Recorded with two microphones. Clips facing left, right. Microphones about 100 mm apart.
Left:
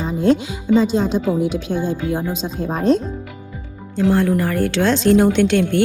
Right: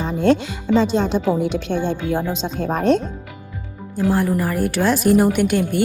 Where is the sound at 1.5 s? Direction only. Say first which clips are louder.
Even; 70° right (ahead or behind).